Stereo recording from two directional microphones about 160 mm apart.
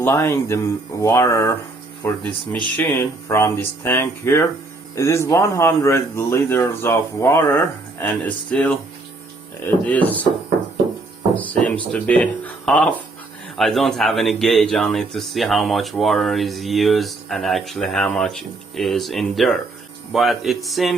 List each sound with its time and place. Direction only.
0.0 s speech: 15° left (ahead or behind)
11.3 s speech: 10° left (ahead or behind)